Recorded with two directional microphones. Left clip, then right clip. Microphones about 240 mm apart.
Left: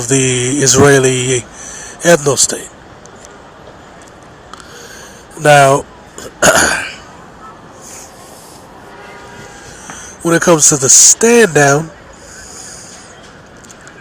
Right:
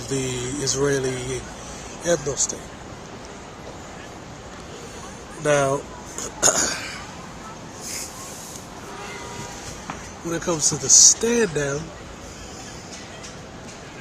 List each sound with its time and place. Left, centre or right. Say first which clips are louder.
0.1 s speech: left 13 dB; left
5.4 s speech: left 13 dB; left
10.2 s speech: left 15 dB; left